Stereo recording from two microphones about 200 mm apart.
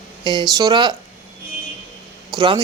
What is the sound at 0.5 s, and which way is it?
Speech, 20° right (ahead or behind).